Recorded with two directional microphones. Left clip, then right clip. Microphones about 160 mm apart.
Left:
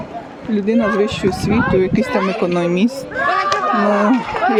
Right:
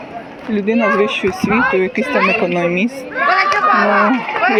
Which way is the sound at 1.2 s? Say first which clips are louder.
Right 3 dB; 30° right (ahead or behind).